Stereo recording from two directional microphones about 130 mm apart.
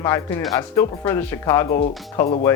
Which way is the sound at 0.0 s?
20° left (ahead or behind).